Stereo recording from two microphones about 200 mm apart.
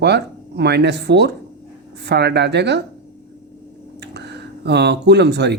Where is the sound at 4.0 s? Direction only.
55° right (ahead or behind).